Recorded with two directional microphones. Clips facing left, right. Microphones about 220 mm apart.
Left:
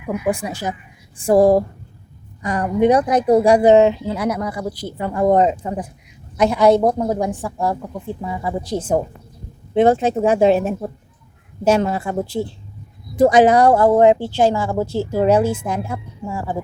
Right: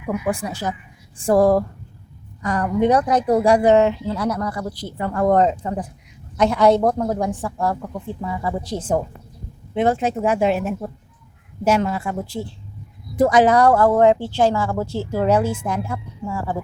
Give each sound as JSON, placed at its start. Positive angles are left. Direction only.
{"t": 0.3, "sound": "a woman's voice", "side_deg": 15}
{"t": 11.8, "sound": "a woman's voice", "side_deg": 30}